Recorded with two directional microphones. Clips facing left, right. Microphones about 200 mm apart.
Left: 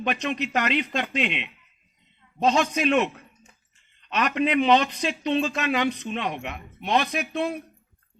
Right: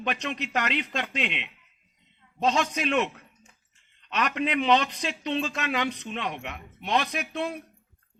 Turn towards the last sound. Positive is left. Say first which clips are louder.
# left 4 dB
turn(degrees=5)  # may be behind; listen again after turning